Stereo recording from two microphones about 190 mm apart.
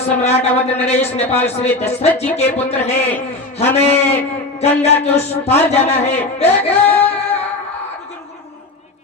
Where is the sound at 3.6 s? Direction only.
10° left (ahead or behind).